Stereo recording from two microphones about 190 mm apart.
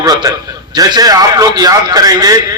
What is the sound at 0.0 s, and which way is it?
A man's voice, 20° right (ahead or behind).